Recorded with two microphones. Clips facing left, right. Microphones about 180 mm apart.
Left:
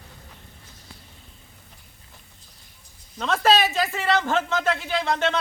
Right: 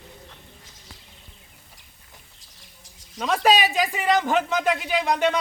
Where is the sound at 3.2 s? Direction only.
10° right (ahead or behind).